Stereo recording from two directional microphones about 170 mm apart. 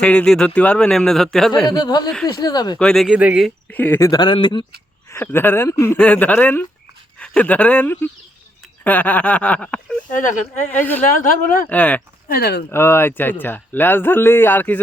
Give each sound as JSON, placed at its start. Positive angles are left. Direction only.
{"t": 0.0, "sound": "a man's voice", "side_deg": 5}
{"t": 1.7, "sound": "speech", "side_deg": 25}
{"t": 2.7, "sound": "a man's voice", "side_deg": 5}
{"t": 3.7, "sound": "speech", "side_deg": 10}
{"t": 5.0, "sound": "a man's voice", "side_deg": 15}
{"t": 10.1, "sound": "speech", "side_deg": 50}
{"t": 10.7, "sound": "a man's voice", "side_deg": 10}
{"t": 11.0, "sound": "speech", "side_deg": 50}
{"t": 11.7, "sound": "a man's voice", "side_deg": 10}
{"t": 12.3, "sound": "speech", "side_deg": 70}
{"t": 12.7, "sound": "a man's voice", "side_deg": 15}